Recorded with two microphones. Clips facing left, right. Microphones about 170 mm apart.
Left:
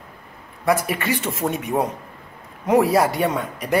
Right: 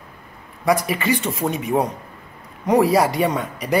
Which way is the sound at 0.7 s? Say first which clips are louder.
Right 2 dB; centre (ahead or behind).